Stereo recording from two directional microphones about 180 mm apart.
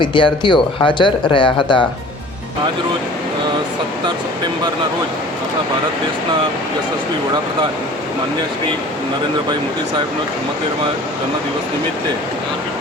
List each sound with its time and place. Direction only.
0.0 s speech: 25° left (ahead or behind)